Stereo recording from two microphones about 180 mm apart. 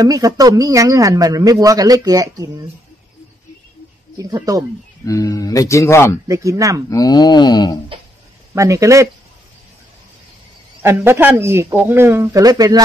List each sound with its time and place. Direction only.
0.0 s speech: 20° right (ahead or behind)
4.2 s speech: 20° right (ahead or behind)
5.0 s speech: 20° left (ahead or behind)
6.2 s speech: 15° right (ahead or behind)
6.9 s speech: 20° left (ahead or behind)
8.5 s speech: 15° right (ahead or behind)
10.8 s speech: 15° right (ahead or behind)